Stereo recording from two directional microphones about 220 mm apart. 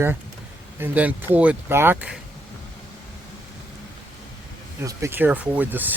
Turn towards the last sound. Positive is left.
turn(degrees=-10)  # may be behind; listen again after turning